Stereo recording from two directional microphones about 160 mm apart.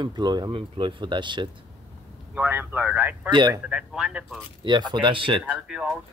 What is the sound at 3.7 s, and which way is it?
Speech, 5° right (ahead or behind).